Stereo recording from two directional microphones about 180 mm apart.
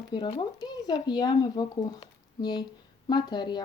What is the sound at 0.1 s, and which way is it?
Speech, 25° left (ahead or behind).